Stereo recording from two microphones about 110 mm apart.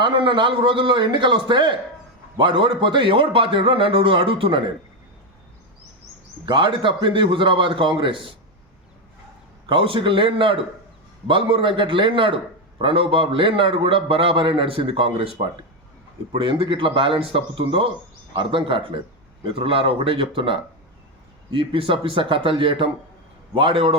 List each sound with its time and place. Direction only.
0.0 s a man's voice: 45° right (ahead or behind)
6.4 s a man's voice: 50° right (ahead or behind)
9.6 s a man's voice: 50° right (ahead or behind)